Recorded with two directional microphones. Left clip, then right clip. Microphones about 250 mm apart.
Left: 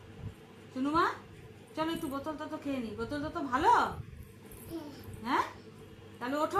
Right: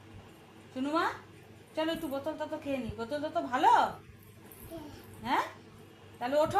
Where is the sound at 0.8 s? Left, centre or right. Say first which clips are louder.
Left 2 dB; centre.